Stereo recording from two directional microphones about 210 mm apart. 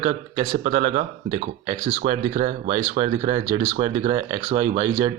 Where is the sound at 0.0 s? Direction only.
35° right (ahead or behind).